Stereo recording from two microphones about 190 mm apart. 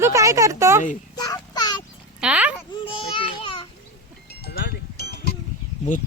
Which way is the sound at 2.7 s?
25° left (ahead or behind).